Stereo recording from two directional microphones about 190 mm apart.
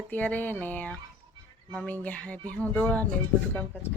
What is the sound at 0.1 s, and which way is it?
Speech, 10° left (ahead or behind).